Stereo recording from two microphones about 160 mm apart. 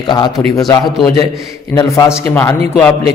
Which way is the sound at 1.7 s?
25° left (ahead or behind).